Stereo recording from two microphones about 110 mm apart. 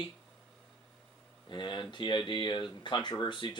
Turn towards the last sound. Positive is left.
turn(degrees=45)  # may be behind; listen again after turning